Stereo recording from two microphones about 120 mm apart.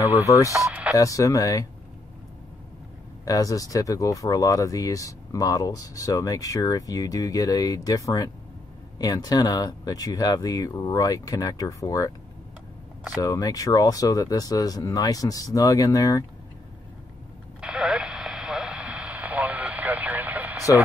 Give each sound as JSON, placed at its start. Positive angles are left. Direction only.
{"t": 0.3, "sound": "speech", "side_deg": 25}
{"t": 0.7, "sound": "speech", "side_deg": -10}
{"t": 0.9, "sound": "speech", "side_deg": 30}
{"t": 3.3, "sound": "speech", "side_deg": 30}
{"t": 13.2, "sound": "speech", "side_deg": 30}
{"t": 17.6, "sound": "radio", "side_deg": -5}